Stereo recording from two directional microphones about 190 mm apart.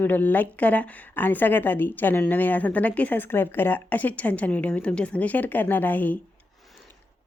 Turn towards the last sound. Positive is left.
turn(degrees=0)  # may be behind; listen again after turning